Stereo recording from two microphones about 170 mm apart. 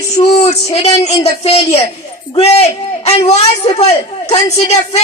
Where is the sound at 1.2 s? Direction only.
40° left (ahead or behind).